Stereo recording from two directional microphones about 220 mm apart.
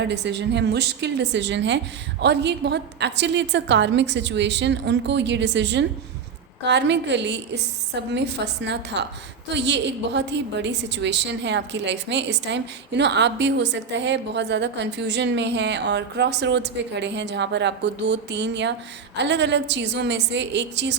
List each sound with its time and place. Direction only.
0.0 s a woman's voice: 50° right (ahead or behind)